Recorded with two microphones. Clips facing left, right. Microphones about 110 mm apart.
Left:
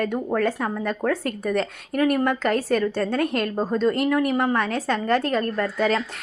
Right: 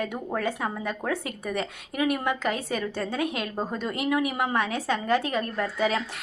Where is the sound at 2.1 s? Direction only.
5° right (ahead or behind).